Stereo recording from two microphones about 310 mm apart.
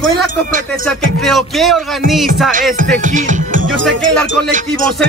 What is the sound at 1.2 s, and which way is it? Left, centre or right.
Speech, centre.